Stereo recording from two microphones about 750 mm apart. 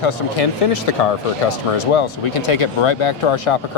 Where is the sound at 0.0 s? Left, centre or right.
Left.